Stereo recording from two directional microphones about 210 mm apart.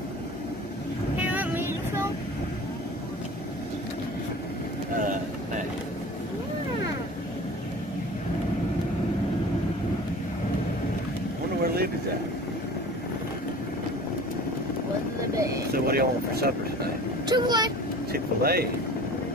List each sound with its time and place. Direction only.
1.1 s vehicle: 5° right (ahead or behind)
11.6 s a sound: 45° right (ahead or behind)
15.7 s vehicle: 45° right (ahead or behind)
17.3 s vehicle: 20° right (ahead or behind)
18.1 s vehicle: 45° right (ahead or behind)